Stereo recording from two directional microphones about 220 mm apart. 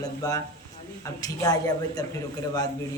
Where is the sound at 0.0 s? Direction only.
15° left (ahead or behind).